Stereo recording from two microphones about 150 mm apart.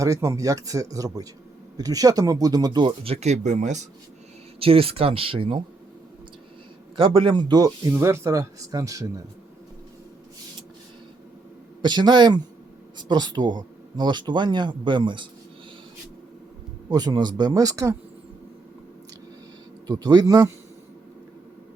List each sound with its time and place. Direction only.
0.0 s speech: 20° right (ahead or behind); by 3.8 s 50° right (ahead or behind)
4.6 s speech: 40° right (ahead or behind)
6.9 s speech: 35° right (ahead or behind)
11.8 s speech: 30° right (ahead or behind)
16.9 s speech: 25° right (ahead or behind)
19.9 s speech: 25° right (ahead or behind)